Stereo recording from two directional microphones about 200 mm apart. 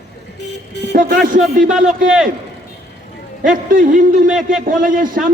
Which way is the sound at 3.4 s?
45° right (ahead or behind).